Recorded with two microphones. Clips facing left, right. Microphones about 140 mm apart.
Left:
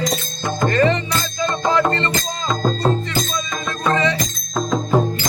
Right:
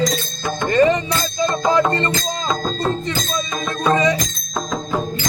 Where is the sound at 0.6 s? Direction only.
15° right (ahead or behind).